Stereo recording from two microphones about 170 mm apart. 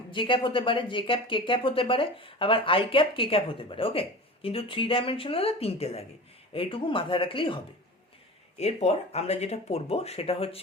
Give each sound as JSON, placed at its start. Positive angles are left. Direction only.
{"t": 0.1, "sound": "speech", "side_deg": 30}